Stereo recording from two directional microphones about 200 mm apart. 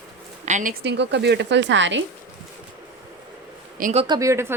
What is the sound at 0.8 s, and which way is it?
A woman's voice, 60° right (ahead or behind).